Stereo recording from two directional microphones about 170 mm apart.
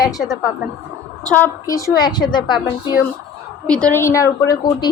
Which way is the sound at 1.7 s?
20° left (ahead or behind).